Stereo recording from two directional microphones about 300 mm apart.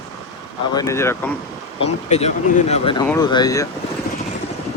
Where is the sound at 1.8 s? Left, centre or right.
Left.